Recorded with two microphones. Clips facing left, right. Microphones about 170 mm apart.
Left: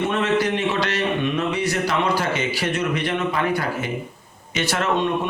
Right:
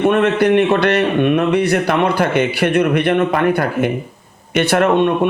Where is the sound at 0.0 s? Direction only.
60° right (ahead or behind).